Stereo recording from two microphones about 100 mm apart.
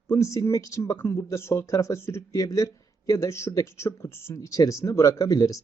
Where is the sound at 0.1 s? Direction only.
30° left (ahead or behind).